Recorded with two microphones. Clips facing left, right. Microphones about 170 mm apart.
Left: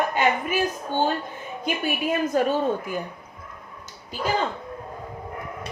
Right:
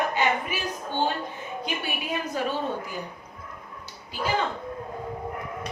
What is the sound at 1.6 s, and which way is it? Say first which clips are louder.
Speech: left 8 dB; 45° left (ahead or behind).